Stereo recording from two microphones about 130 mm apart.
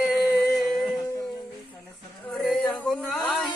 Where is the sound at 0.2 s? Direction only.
Centre (ahead or behind).